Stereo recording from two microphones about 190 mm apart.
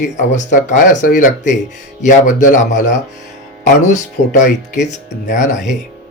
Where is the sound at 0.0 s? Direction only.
40° left (ahead or behind).